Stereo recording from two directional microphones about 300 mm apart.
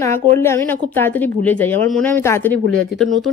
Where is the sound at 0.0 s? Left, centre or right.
Centre.